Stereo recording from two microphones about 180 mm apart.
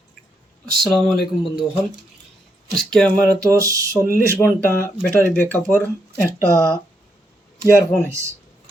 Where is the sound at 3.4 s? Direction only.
20° right (ahead or behind).